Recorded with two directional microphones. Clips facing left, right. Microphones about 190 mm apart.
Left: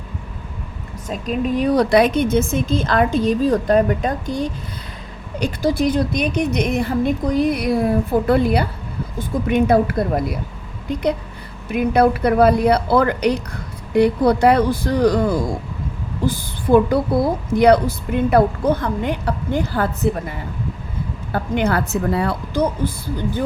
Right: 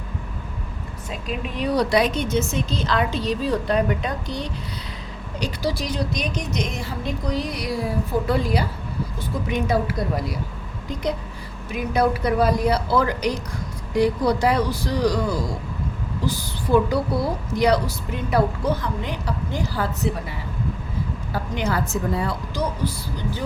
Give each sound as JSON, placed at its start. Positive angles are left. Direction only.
{"t": 1.1, "sound": "a woman's voice", "side_deg": 45}
{"t": 11.7, "sound": "a woman's voice", "side_deg": 55}
{"t": 21.3, "sound": "a woman's voice", "side_deg": 55}